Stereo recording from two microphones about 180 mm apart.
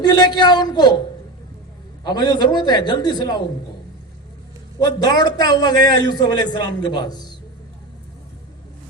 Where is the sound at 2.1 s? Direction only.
25° left (ahead or behind).